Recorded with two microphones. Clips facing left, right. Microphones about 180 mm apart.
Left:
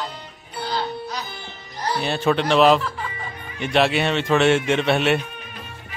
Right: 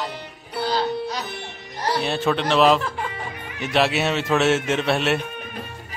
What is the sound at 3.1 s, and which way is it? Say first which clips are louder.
Music: right 2 dB; 75° right (ahead or behind).